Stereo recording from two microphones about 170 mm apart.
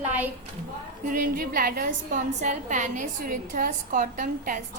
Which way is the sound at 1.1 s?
55° right (ahead or behind).